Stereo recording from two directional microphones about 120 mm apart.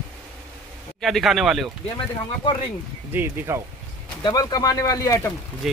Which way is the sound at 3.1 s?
20° right (ahead or behind).